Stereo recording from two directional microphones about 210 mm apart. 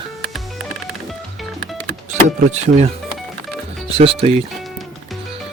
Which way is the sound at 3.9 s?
30° right (ahead or behind).